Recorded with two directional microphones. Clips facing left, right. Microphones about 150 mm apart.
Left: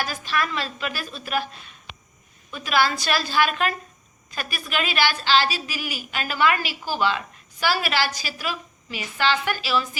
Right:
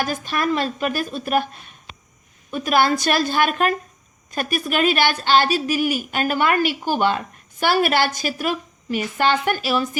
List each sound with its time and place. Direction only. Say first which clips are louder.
0.0 s a woman's voice: right 4 dB; 50° right (ahead or behind)
2.5 s a woman's voice: right 5 dB; 50° right (ahead or behind)